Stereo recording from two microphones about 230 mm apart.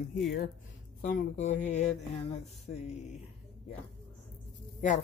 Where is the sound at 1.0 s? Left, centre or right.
Left.